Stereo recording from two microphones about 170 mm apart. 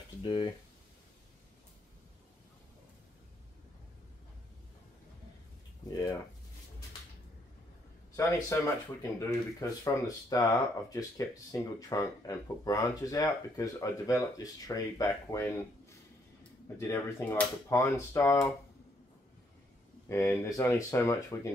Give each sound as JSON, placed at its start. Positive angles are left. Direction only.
{"t": 0.2, "sound": "speech", "side_deg": 25}
{"t": 5.9, "sound": "speech", "side_deg": 25}
{"t": 8.2, "sound": "speech", "side_deg": 15}
{"t": 16.6, "sound": "speech", "side_deg": 15}
{"t": 20.1, "sound": "speech", "side_deg": 15}